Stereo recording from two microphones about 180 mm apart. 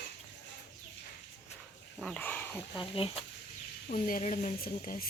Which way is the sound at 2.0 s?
5° left (ahead or behind).